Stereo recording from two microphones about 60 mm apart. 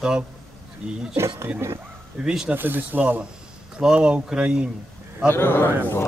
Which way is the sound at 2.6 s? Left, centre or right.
Right.